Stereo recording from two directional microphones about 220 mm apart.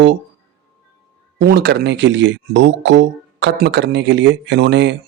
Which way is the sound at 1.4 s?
45° right (ahead or behind).